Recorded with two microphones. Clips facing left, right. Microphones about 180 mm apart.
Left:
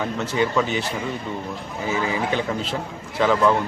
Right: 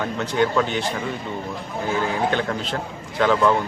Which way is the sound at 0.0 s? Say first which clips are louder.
Right 1 dB; centre (ahead or behind).